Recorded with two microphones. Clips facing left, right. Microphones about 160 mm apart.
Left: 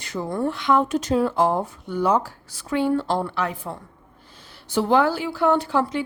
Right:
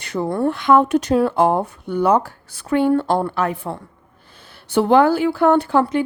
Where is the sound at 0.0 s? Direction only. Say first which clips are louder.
Right 5 dB; 65° right (ahead or behind).